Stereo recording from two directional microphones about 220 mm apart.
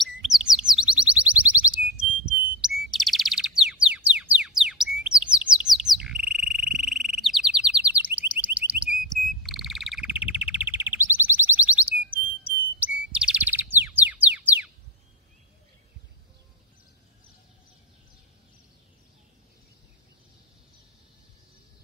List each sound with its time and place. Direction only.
0.2 s chirp tone: centre (ahead or behind)
2.0 s bird: 5° right (ahead or behind)